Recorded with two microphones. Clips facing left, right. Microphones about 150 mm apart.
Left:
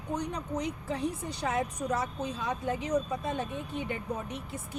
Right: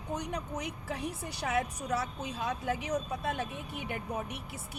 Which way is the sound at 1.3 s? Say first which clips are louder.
Right 1 dB; 70° right (ahead or behind).